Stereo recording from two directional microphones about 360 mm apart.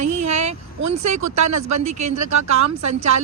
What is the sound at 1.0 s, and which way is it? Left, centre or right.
Speech, right.